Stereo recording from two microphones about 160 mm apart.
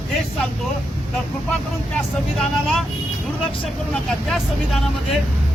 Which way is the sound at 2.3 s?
Centre (ahead or behind).